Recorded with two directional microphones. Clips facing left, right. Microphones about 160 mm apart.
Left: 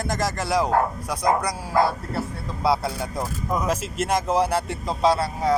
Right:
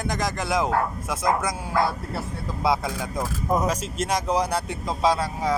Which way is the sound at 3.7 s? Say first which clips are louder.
Left 2 dB; 5° left (ahead or behind).